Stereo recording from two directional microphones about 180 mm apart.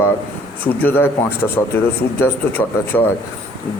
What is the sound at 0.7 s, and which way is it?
Speech, 10° left (ahead or behind).